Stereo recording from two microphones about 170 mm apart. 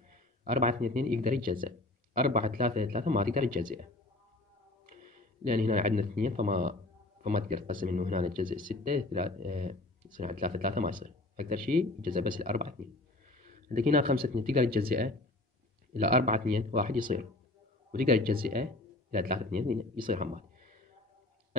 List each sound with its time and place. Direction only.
0.1 s speech: 50° right (ahead or behind)
4.8 s a man's voice: 50° right (ahead or behind)